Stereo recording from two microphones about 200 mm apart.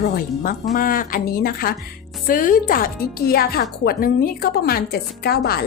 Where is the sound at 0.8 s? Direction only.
45° left (ahead or behind).